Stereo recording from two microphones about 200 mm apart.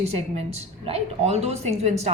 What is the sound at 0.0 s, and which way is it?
A woman's voice, 30° right (ahead or behind).